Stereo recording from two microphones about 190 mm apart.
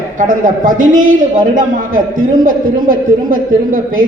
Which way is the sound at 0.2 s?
45° right (ahead or behind).